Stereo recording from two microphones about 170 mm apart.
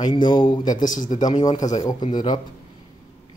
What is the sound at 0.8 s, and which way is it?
Speech, 50° left (ahead or behind).